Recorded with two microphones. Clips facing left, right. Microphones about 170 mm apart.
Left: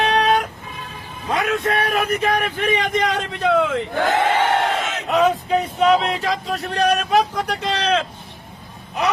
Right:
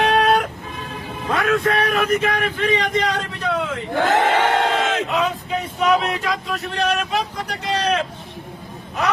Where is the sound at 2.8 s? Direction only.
55° left (ahead or behind).